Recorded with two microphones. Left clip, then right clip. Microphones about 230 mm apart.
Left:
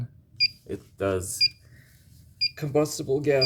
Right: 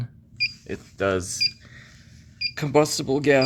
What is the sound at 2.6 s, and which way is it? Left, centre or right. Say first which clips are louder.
Speech: right 8 dB; centre.